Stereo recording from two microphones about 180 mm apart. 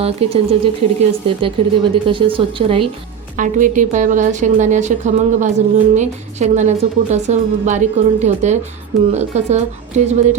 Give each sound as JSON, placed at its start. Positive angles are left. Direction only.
{"t": 0.0, "sound": "speech", "side_deg": -35}
{"t": 3.3, "sound": "a woman's voice", "side_deg": -45}